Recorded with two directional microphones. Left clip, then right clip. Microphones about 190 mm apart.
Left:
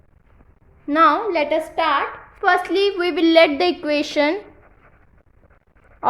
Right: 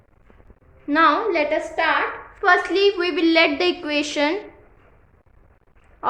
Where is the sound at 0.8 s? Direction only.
35° left (ahead or behind).